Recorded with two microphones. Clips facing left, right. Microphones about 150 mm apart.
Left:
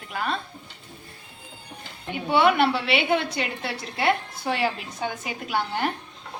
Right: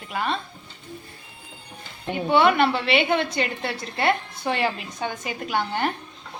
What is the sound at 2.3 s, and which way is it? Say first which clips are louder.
A woman's voice: right 1 dB; 5° left (ahead or behind).